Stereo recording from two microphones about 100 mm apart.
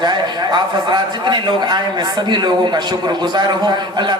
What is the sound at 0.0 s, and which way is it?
A man's voice, 45° right (ahead or behind).